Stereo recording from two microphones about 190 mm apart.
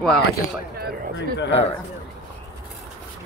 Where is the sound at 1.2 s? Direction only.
70° left (ahead or behind).